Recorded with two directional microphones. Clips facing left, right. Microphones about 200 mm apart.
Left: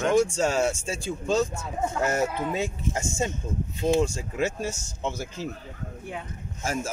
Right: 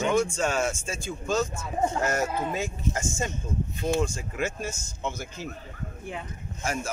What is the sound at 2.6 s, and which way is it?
Speech, 20° left (ahead or behind).